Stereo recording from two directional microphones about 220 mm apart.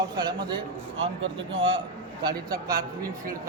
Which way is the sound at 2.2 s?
15° right (ahead or behind).